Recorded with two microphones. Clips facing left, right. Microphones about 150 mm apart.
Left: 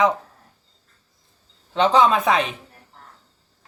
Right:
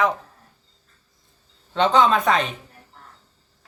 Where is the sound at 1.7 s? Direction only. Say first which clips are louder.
Left 1 dB; 10° left (ahead or behind).